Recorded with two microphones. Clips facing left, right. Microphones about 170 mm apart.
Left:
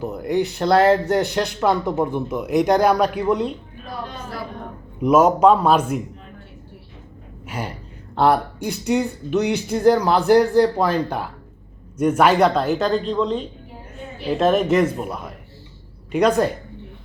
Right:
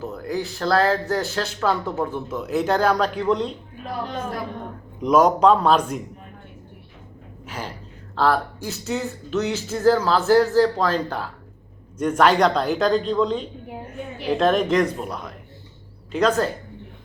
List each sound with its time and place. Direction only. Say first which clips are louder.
0.0 s speech: left 6 dB; 15° left (ahead or behind)
4.9 s speech: left 2 dB; 5° left (ahead or behind)
7.4 s a sound: left 3 dB; 10° left (ahead or behind)
8.1 s speech: left 3 dB; 20° left (ahead or behind)